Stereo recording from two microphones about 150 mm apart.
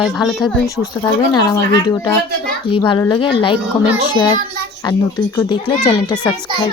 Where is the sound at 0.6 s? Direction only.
25° left (ahead or behind).